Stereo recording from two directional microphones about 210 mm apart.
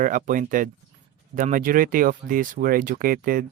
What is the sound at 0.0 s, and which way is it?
Speech, 40° right (ahead or behind).